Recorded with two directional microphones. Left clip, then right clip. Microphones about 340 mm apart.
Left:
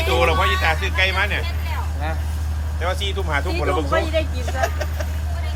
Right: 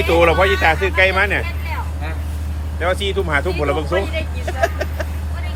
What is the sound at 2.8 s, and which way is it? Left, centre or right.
Speech, right.